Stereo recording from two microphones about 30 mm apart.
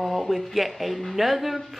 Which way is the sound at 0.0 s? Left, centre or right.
Centre.